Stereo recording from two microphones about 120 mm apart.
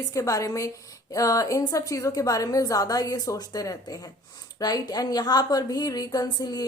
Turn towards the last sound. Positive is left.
turn(degrees=35)  # may be behind; listen again after turning